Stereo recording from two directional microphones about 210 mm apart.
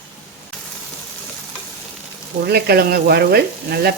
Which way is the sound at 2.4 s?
50° right (ahead or behind).